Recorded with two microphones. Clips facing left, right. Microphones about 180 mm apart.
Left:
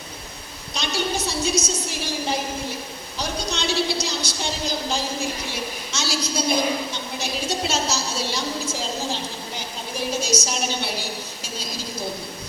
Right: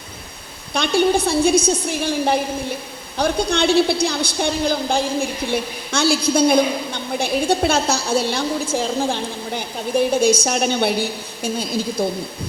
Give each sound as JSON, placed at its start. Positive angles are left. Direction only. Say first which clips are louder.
{"t": 0.7, "sound": "a woman's voice", "louder": "right 10 dB", "side_deg": -55}